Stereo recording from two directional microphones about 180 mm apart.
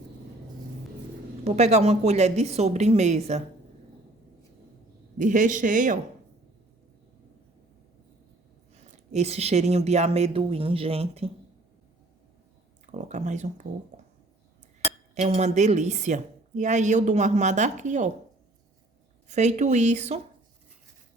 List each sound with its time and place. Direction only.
1.5 s a woman's voice: 40° right (ahead or behind)
5.1 s a man's voice: 45° right (ahead or behind)
9.1 s a woman's voice: 35° right (ahead or behind)
12.8 s speech: 40° right (ahead or behind)
15.1 s a woman's voice: 40° right (ahead or behind)
19.3 s a woman's voice: 40° right (ahead or behind)